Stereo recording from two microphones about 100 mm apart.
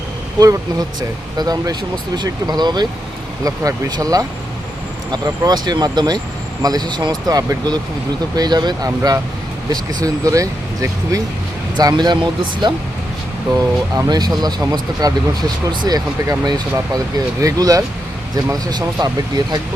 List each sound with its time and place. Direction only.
0.3 s speech: 35° right (ahead or behind); by 12.7 s 50° right (ahead or behind)
13.5 s speech: 40° right (ahead or behind)